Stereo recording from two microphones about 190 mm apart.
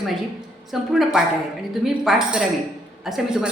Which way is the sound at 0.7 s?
Centre (ahead or behind).